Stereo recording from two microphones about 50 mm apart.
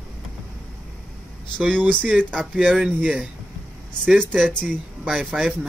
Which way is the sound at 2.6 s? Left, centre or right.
Centre.